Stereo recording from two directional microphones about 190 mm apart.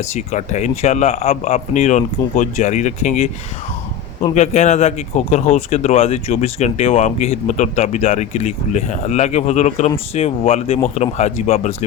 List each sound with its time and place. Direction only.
0.1 s speech: 35° left (ahead or behind)